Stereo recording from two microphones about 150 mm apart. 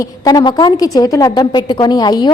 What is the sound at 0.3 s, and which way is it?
A woman's voice, 25° left (ahead or behind).